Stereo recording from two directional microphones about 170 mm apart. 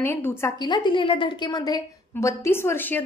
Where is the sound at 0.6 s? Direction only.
25° left (ahead or behind); by 3.0 s 10° left (ahead or behind).